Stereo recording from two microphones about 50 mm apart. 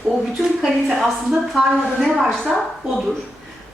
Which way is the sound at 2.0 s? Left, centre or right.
Centre.